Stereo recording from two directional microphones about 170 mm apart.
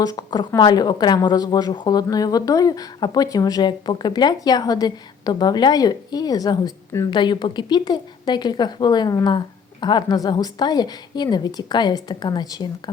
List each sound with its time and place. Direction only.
0.0 s speech: 20° left (ahead or behind)